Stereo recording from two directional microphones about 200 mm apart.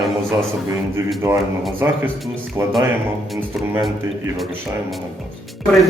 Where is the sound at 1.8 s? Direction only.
15° right (ahead or behind).